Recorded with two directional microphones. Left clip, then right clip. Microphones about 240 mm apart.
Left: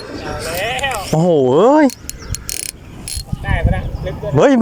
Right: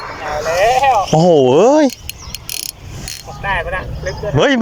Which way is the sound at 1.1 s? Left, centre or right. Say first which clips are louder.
Left 1 dB; centre.